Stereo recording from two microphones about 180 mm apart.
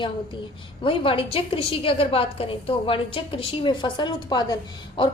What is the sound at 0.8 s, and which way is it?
A woman's voice, 30° left (ahead or behind).